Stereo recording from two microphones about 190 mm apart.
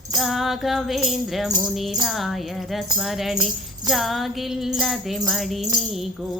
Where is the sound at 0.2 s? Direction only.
Centre (ahead or behind).